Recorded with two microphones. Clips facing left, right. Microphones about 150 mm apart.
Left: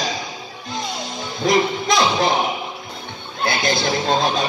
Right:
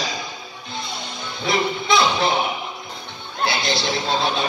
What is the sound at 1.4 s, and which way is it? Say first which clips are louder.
Speech: left 4 dB; 40° left (ahead or behind).